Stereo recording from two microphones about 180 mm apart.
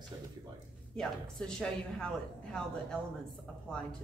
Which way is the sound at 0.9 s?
5° left (ahead or behind).